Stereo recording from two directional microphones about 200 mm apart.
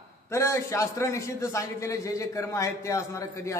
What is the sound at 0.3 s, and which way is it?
A man's voice, 15° left (ahead or behind).